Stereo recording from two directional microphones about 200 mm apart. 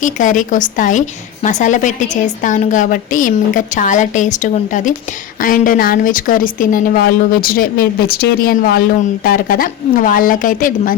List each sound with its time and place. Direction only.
0.0 s a woman's voice: 40° left (ahead or behind)